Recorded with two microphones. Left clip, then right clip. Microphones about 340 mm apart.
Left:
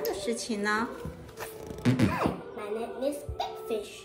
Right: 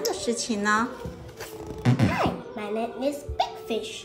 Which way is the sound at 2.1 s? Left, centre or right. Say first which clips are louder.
Right 4 dB; centre.